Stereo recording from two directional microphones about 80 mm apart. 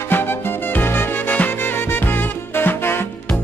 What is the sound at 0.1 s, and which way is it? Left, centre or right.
Music, left.